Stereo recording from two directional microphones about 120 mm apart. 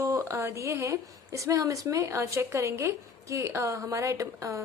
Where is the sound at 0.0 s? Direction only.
25° right (ahead or behind).